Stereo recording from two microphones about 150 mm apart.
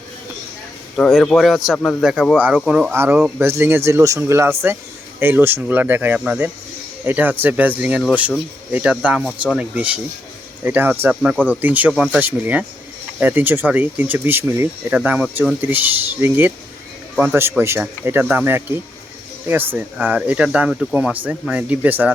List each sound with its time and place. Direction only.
1.1 s speech: centre (ahead or behind)
1.7 s speech: 10° left (ahead or behind)
2.0 s speech: 5° right (ahead or behind)
3.4 s speech: 15° right (ahead or behind)